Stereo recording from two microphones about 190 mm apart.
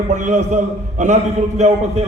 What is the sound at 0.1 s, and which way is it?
A man's voice, 40° right (ahead or behind).